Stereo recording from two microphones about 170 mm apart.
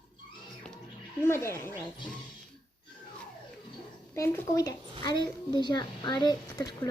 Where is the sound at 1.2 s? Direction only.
15° left (ahead or behind).